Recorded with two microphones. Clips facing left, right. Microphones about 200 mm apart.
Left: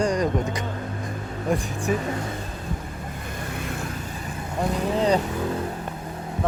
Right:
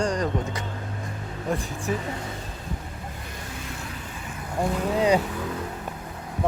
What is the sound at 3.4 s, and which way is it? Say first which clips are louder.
Vehicle: left 7 dB; 55° left (ahead or behind).